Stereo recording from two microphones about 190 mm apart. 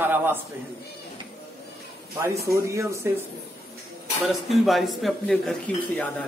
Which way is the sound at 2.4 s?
15° right (ahead or behind).